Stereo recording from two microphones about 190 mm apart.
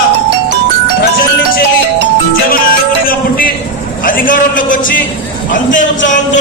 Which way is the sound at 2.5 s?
50° left (ahead or behind).